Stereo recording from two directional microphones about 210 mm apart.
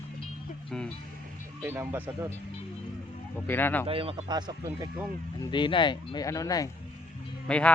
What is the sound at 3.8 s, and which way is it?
Speech, 25° right (ahead or behind).